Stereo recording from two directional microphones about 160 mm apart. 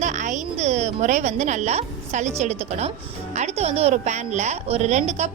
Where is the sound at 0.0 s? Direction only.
50° right (ahead or behind).